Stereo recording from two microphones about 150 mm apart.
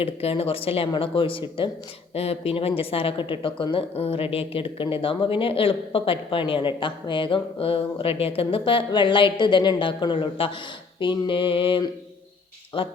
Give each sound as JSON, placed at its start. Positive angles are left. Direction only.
{"t": 0.0, "sound": "speech", "side_deg": 40}